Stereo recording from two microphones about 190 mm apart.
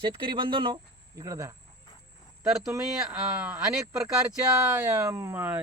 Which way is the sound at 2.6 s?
5° right (ahead or behind).